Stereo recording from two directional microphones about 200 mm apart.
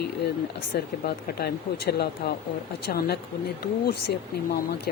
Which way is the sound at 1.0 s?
55° left (ahead or behind).